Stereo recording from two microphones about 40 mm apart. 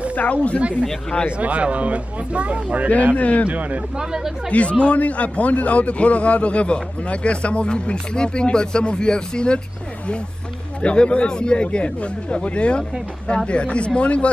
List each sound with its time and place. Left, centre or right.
0.1 s a man's voice: left
0.6 s speech: right
3.2 s a man's voice: left
3.4 s speech: right
3.9 s speech: centre
4.5 s a man's voice: left
10.8 s speech: left